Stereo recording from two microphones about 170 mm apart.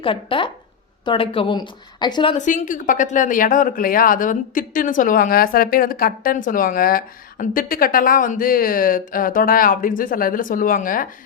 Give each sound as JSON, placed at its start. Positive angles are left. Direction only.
{"t": 0.0, "sound": "a woman's voice", "side_deg": 30}
{"t": 2.4, "sound": "a woman's voice", "side_deg": 50}